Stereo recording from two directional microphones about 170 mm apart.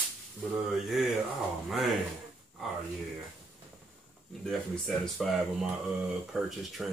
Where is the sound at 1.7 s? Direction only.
Centre (ahead or behind).